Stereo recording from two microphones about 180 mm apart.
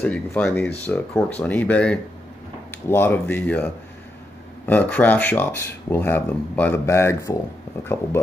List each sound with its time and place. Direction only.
0.0 s speech: 10° left (ahead or behind)